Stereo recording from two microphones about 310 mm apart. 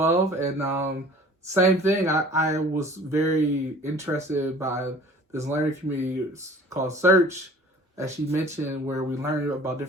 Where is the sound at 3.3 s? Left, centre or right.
Right.